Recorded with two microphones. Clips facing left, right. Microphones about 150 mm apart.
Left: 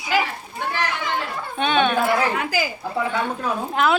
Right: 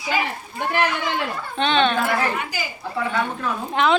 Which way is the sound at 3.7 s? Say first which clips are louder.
Right 1 dB; 5° left (ahead or behind).